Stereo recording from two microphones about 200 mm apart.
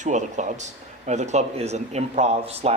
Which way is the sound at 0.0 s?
35° right (ahead or behind).